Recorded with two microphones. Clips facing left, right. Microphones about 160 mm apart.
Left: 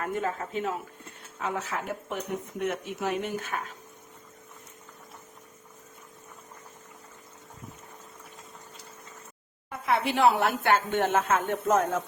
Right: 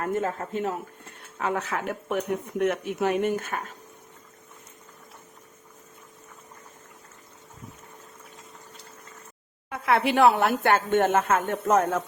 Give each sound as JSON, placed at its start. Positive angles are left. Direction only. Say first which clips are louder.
{"t": 0.0, "sound": "speech", "louder": "right 3 dB", "side_deg": -45}
{"t": 1.4, "sound": "speech", "louder": "right 4 dB", "side_deg": -65}
{"t": 9.6, "sound": "speech", "louder": "right 4 dB", "side_deg": -65}